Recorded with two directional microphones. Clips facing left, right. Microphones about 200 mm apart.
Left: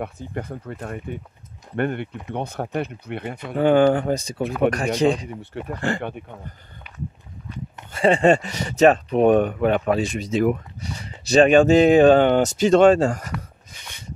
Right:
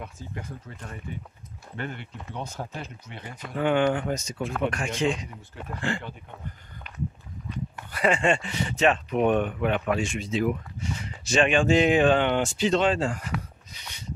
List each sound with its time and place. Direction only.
0.0 s speech: 60° left (ahead or behind)
3.5 s speech: 35° left (ahead or behind)
7.7 s speech: 25° left (ahead or behind); by 10.6 s 50° left (ahead or behind)
10.8 s speech: 35° left (ahead or behind)
13.7 s a sound: 50° left (ahead or behind)